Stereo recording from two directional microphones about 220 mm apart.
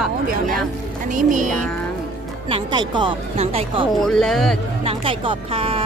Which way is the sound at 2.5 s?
25° right (ahead or behind).